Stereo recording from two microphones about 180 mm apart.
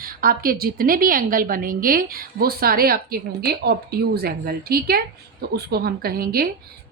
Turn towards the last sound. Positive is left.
turn(degrees=-60)  # may be behind; listen again after turning